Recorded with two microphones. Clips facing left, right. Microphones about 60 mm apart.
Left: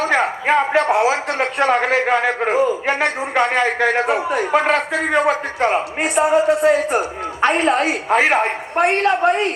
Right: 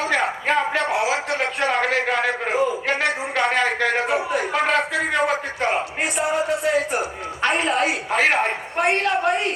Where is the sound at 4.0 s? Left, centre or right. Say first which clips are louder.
Left 3 dB; left.